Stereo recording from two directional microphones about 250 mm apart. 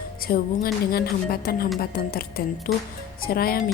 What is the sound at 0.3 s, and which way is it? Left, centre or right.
A woman's voice, left.